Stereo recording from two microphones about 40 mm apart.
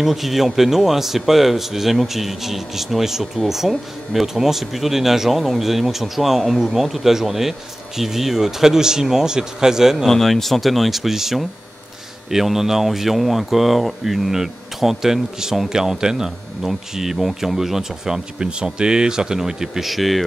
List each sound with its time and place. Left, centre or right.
0.0 s speech: centre
10.0 s speech: centre
19.9 s speech: centre